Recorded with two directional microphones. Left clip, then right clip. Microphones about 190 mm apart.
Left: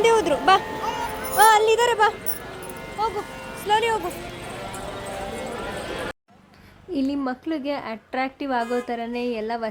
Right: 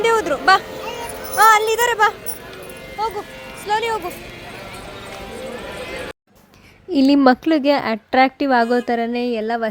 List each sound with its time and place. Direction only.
0.0 s speech: 5° left (ahead or behind)
3.0 s speech: 10° right (ahead or behind)
3.7 s speech: centre (ahead or behind)
6.9 s a woman's voice: 40° right (ahead or behind)